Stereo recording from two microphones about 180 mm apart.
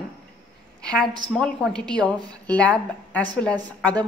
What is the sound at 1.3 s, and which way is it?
A woman's voice, 5° left (ahead or behind).